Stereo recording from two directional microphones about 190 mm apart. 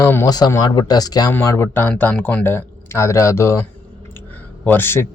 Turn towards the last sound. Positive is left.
turn(degrees=10)  # may be behind; listen again after turning